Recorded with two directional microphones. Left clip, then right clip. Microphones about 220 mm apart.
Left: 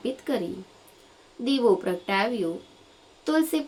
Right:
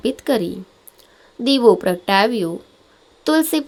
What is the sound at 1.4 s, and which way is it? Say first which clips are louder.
Speech: right 9 dB; 45° right (ahead or behind).